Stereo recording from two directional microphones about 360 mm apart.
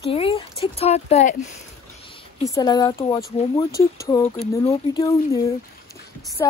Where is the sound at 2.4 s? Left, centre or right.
Centre.